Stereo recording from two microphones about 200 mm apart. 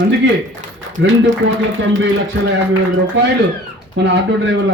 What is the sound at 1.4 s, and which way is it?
Speech, 65° right (ahead or behind).